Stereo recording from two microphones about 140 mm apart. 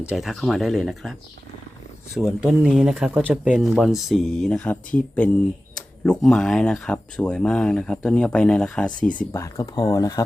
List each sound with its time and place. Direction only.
0.1 s speech: centre (ahead or behind)
2.1 s speech: 5° right (ahead or behind)
9.3 s speech: 20° left (ahead or behind)